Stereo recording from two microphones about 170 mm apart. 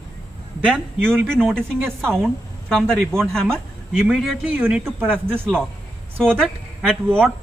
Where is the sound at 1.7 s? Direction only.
5° left (ahead or behind).